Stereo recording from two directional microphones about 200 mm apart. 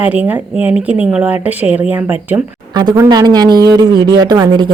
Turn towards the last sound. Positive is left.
turn(degrees=-20)  # may be behind; listen again after turning